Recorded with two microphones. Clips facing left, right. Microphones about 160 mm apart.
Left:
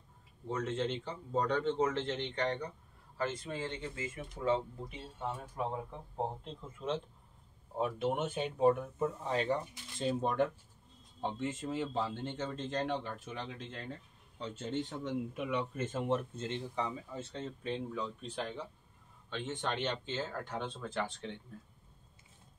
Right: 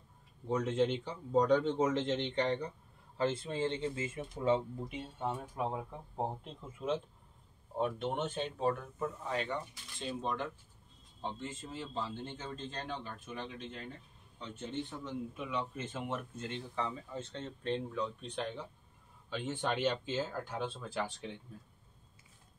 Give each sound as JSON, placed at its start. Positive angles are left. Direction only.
{"t": 0.5, "sound": "speech", "side_deg": -15}
{"t": 7.7, "sound": "speech", "side_deg": 5}
{"t": 10.2, "sound": "speech", "side_deg": 50}
{"t": 11.1, "sound": "speech", "side_deg": 70}
{"t": 16.3, "sound": "speech", "side_deg": 20}
{"t": 19.3, "sound": "speech", "side_deg": -10}